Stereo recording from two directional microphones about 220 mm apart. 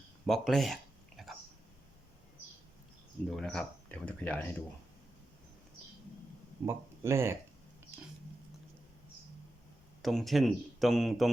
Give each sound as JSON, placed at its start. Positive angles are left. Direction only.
{"t": 0.3, "sound": "a sound", "side_deg": 0}
{"t": 3.2, "sound": "speech", "side_deg": 0}
{"t": 6.7, "sound": "speech", "side_deg": -10}
{"t": 10.0, "sound": "speech", "side_deg": 0}